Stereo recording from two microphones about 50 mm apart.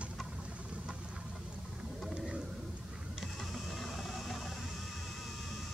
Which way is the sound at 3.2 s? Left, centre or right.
Centre.